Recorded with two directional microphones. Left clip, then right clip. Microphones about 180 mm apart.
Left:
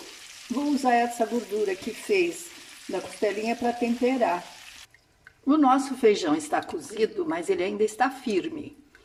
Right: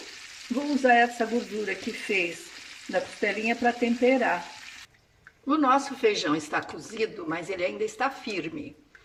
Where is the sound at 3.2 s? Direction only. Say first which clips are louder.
Left 3 dB; 25° left (ahead or behind).